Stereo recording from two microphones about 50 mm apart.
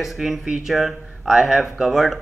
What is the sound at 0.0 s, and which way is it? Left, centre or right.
A man's voice, centre.